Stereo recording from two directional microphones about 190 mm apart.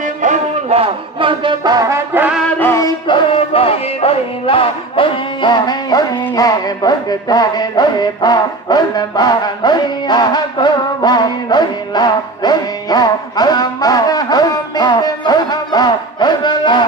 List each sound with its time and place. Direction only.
0.2 s music: 40° right (ahead or behind); by 2.4 s 10° right (ahead or behind)
2.4 s music: 10° left (ahead or behind)
3.3 s music: 30° left (ahead or behind)